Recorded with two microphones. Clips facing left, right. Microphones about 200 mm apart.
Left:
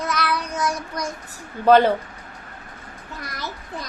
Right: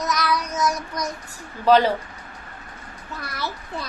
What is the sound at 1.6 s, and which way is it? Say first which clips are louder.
Speech: left 2 dB; 55° left (ahead or behind).